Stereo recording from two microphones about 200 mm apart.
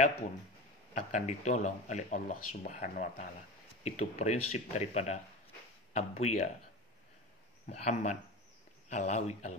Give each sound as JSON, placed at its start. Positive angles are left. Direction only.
{"t": 0.9, "sound": "speech", "side_deg": 35}
{"t": 7.6, "sound": "speech", "side_deg": 35}